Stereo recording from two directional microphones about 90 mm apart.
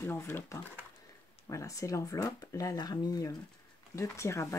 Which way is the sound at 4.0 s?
30° left (ahead or behind).